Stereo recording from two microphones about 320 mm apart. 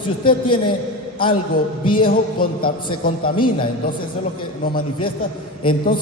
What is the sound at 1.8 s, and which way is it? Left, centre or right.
Speech, centre.